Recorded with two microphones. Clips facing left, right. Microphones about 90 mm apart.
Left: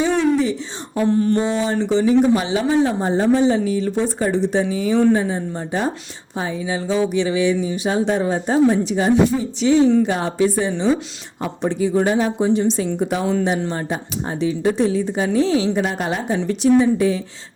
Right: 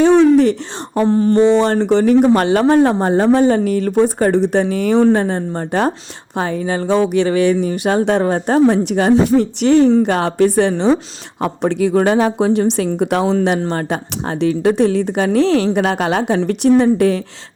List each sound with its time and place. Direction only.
1.0 s a sound: 35° right (ahead or behind)
1.4 s a woman's voice: 70° right (ahead or behind)
16.5 s speech: 60° right (ahead or behind)